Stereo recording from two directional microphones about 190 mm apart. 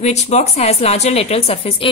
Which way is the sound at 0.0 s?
35° left (ahead or behind).